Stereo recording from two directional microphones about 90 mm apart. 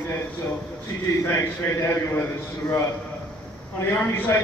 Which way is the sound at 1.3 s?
30° left (ahead or behind).